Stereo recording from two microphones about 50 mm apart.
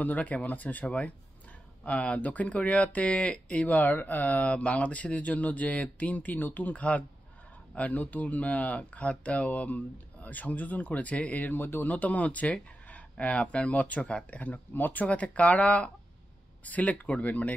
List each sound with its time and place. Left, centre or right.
0.0 s speech: left